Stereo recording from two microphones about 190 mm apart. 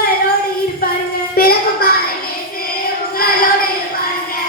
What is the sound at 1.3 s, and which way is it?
Child singing, 50° left (ahead or behind).